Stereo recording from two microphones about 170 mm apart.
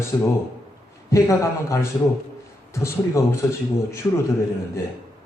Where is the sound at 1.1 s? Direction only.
20° left (ahead or behind).